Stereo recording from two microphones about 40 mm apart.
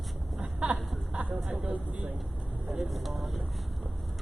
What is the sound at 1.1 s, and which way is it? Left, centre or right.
Vehicle, right.